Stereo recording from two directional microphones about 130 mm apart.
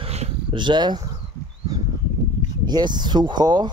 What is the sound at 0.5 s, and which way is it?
Speech, 35° right (ahead or behind).